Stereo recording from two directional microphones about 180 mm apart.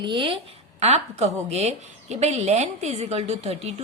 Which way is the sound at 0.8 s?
35° right (ahead or behind).